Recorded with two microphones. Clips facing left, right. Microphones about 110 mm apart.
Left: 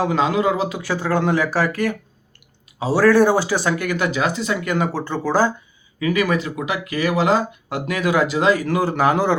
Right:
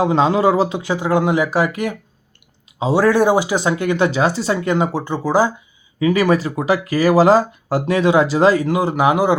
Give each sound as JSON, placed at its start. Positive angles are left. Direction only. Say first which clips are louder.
{"t": 0.0, "sound": "speech", "louder": "right 4 dB", "side_deg": -30}
{"t": 0.8, "sound": "speech", "louder": "right 3 dB", "side_deg": -15}
{"t": 6.0, "sound": "speech", "louder": "right 4 dB", "side_deg": -30}
{"t": 8.6, "sound": "speech", "louder": "right 2 dB", "side_deg": -15}